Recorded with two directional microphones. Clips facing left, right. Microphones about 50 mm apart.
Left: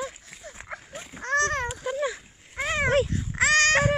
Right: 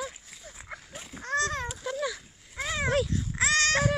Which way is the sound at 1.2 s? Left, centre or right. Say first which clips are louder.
Left 4 dB; left.